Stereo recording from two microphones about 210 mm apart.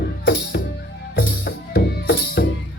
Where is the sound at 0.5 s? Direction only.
55° left (ahead or behind).